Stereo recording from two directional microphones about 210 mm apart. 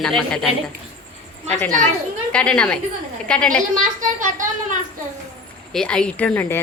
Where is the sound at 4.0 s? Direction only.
40° right (ahead or behind).